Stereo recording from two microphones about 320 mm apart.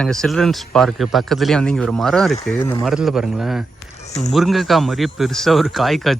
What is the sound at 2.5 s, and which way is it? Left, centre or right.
Speech, left.